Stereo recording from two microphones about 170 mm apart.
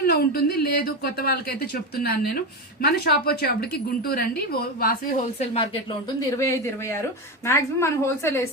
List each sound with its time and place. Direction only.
0.0 s a woman's voice: 70° left (ahead or behind)
5.4 s speech: 35° left (ahead or behind)
6.3 s a woman's voice: 15° left (ahead or behind)